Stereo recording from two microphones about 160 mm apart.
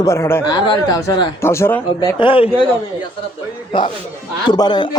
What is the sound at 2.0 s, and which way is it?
Speech, 30° left (ahead or behind).